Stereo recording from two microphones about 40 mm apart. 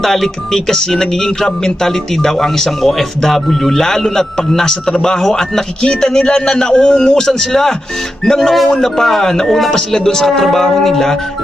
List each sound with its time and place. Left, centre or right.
0.0 s music: centre